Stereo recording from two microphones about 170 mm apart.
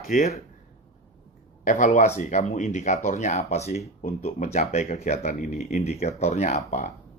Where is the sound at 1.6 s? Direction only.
50° left (ahead or behind).